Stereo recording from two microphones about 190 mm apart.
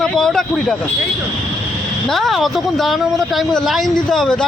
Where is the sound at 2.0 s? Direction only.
Centre (ahead or behind).